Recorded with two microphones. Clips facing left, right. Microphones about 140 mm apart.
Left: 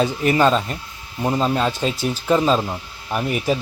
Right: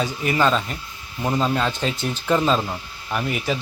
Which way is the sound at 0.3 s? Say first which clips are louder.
Left 1 dB; 15° left (ahead or behind).